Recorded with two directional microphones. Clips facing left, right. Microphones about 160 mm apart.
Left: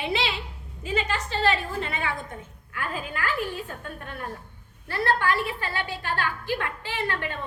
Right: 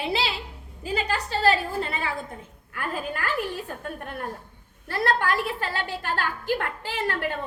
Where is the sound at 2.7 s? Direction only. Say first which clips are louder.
Right 1 dB; 45° right (ahead or behind).